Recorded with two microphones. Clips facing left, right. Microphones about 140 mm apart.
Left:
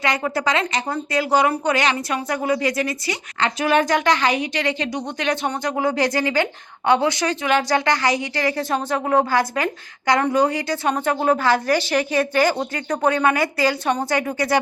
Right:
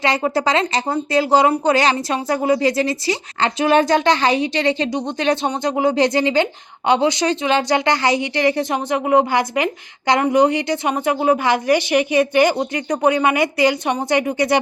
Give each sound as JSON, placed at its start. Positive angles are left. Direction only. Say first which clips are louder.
{"t": 0.0, "sound": "a woman's voice", "louder": "right 3 dB", "side_deg": -30}